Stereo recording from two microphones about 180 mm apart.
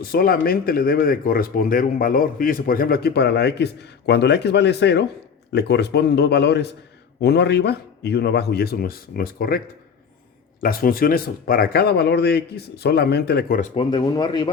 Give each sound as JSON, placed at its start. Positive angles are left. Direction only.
{"t": 0.0, "sound": "speech", "side_deg": 55}
{"t": 10.6, "sound": "speech", "side_deg": 55}
{"t": 13.6, "sound": "speech", "side_deg": 30}